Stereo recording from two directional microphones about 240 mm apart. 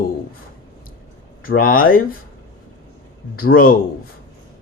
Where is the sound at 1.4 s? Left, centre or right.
Left.